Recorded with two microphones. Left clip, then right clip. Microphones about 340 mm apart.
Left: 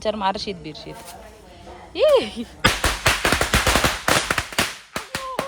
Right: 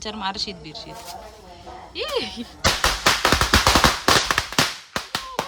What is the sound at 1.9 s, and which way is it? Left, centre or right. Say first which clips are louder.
Speech: left 10 dB; centre.